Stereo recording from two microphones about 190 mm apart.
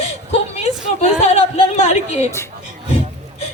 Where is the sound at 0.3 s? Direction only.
35° left (ahead or behind).